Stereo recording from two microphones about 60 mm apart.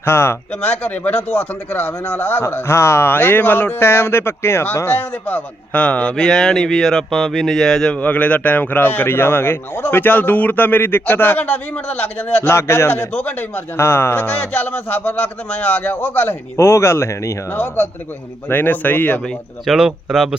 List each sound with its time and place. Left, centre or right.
0.0 s speech: left
0.6 s speech: left
6.2 s speech: centre
7.9 s speech: left
16.6 s speech: left
17.5 s speech: left
19.6 s speech: centre